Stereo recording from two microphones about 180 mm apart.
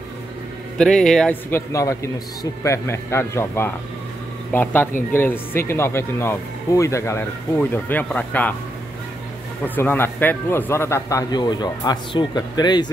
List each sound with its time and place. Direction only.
0.7 s a man's voice: 5° left (ahead or behind)
9.8 s speech: 10° left (ahead or behind)